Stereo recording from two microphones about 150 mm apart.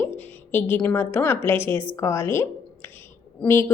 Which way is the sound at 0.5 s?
15° left (ahead or behind).